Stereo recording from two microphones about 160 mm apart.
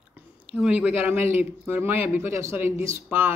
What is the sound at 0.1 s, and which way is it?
Speech, 5° right (ahead or behind).